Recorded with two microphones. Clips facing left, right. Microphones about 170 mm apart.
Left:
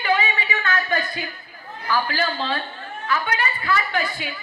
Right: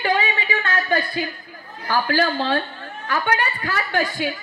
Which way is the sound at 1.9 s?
45° right (ahead or behind).